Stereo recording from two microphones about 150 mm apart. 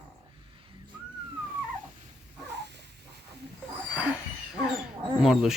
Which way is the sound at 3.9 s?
10° right (ahead or behind).